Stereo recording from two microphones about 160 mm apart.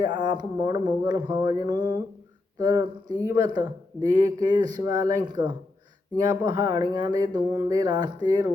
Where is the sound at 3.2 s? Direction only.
25° right (ahead or behind).